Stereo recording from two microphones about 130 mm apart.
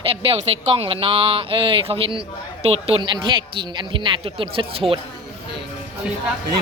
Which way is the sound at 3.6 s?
40° right (ahead or behind).